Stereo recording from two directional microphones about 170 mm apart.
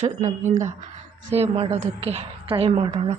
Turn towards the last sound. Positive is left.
turn(degrees=-35)  # may be behind; listen again after turning